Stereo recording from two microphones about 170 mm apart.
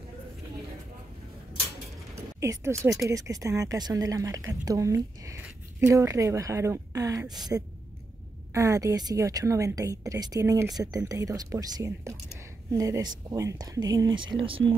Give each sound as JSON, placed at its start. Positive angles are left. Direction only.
{"t": 2.1, "sound": "speech", "side_deg": -15}